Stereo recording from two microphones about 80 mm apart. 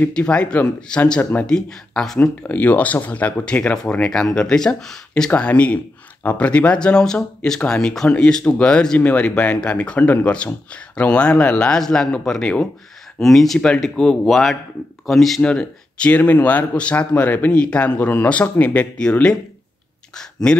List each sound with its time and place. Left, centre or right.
0.0 s speech: centre
2.2 s speech: centre
5.3 s speech: centre
15.4 s speech: centre
20.5 s speech: centre